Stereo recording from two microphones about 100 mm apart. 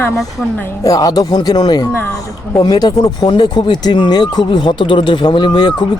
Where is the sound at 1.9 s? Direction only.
20° left (ahead or behind).